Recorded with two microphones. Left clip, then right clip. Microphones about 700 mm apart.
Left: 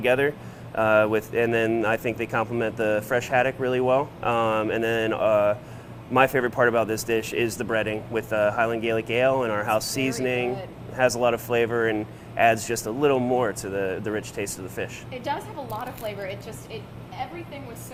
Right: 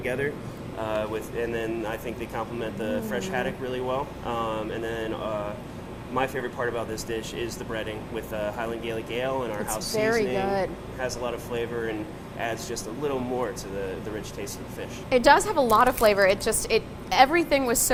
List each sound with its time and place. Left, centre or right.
0.0 s speech: left
15.1 s a woman's voice: right
17.1 s a woman's voice: right